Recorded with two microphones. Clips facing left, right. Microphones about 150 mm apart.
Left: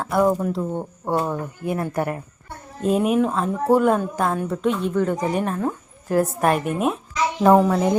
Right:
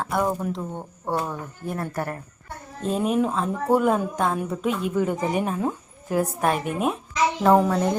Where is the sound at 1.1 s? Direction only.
15° left (ahead or behind).